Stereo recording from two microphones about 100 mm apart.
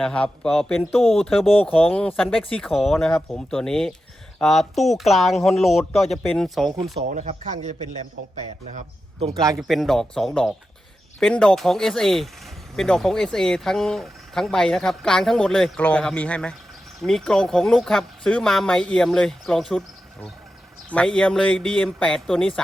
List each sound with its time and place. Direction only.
0.0 s speech: 10° left (ahead or behind)
1.6 s speech: 15° left (ahead or behind)
7.0 s speech: 90° right
9.3 s speech: 35° right (ahead or behind)
9.6 s speech: centre (ahead or behind)
20.9 s speech: 10° left (ahead or behind)